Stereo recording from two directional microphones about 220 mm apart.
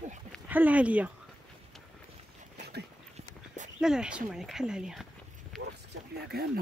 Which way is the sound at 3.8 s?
5° right (ahead or behind).